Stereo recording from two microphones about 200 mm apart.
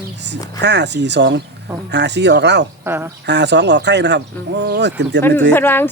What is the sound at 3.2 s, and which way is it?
Speech, 60° right (ahead or behind).